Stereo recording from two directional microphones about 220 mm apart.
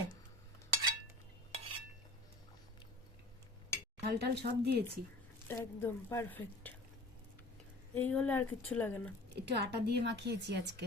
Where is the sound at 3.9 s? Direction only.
45° right (ahead or behind).